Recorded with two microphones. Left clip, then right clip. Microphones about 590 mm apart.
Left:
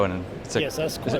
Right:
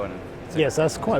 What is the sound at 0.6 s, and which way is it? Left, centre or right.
Speech, right.